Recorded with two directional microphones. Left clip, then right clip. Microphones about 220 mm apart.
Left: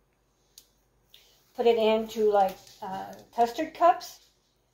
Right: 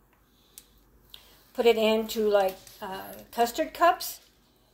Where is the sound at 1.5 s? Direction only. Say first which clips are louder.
Even; 55° right (ahead or behind).